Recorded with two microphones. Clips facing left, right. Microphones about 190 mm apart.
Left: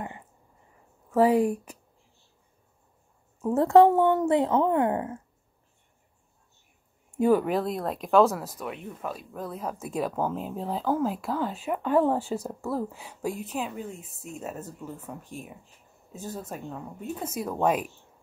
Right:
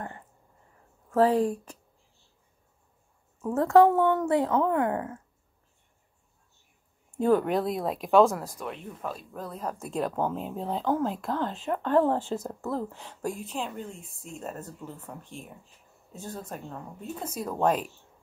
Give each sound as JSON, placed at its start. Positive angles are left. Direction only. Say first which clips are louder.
{"t": 1.1, "sound": "speech", "louder": "left 1 dB", "side_deg": 10}
{"t": 3.5, "sound": "speech", "louder": "left 2 dB", "side_deg": 25}
{"t": 7.2, "sound": "speech", "louder": "left 1 dB", "side_deg": 5}